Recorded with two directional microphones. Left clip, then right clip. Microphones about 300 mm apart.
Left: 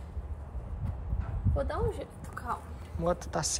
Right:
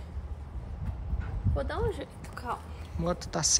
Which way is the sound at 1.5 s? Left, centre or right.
Centre.